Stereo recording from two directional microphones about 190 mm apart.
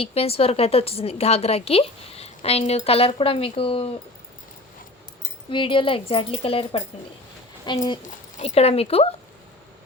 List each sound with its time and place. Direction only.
0.0 s a woman's voice: 30° left (ahead or behind)
5.5 s speech: 25° left (ahead or behind)
8.4 s a woman's voice: 35° left (ahead or behind)